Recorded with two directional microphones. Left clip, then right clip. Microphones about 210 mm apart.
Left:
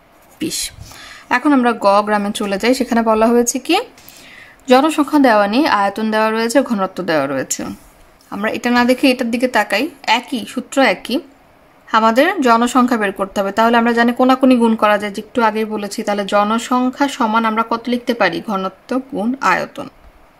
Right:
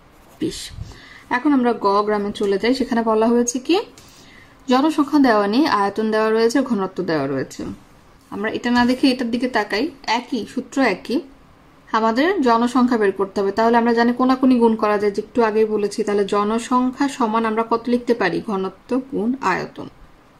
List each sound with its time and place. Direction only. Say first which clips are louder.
0.4 s a woman's voice: left 3 dB; 35° left (ahead or behind)